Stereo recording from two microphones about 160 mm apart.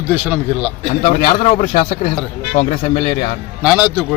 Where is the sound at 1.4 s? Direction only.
50° left (ahead or behind).